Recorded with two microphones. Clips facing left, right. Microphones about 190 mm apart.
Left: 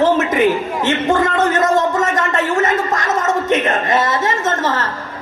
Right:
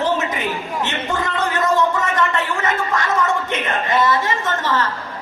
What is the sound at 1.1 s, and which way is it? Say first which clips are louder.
Speech: left 7 dB; 45° left (ahead or behind).